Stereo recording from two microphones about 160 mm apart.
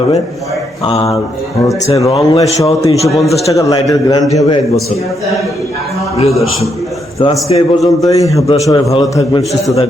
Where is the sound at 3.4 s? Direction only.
20° left (ahead or behind).